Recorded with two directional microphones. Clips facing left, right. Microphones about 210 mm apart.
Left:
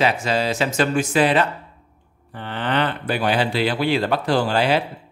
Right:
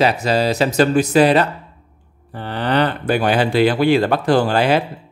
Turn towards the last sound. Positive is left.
turn(degrees=-50)  # may be behind; listen again after turning